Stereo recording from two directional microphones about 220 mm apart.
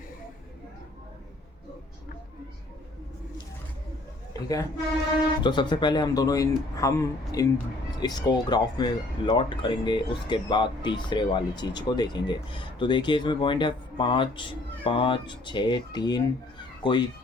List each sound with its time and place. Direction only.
4.4 s a woman's voice: 15° left (ahead or behind)